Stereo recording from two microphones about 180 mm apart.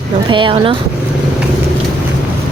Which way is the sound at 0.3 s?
25° right (ahead or behind).